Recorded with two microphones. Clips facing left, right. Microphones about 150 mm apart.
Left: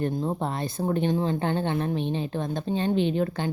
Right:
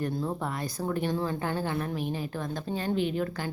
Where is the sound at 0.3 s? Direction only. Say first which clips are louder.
Left 4 dB; 25° left (ahead or behind).